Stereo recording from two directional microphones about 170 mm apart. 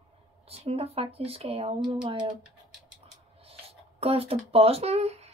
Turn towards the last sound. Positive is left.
turn(degrees=-40)  # may be behind; listen again after turning